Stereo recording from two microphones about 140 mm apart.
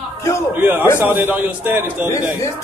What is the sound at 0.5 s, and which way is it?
A man's voice, 15° right (ahead or behind).